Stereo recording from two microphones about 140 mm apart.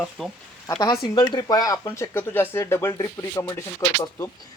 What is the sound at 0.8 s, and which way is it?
Speech, 30° left (ahead or behind).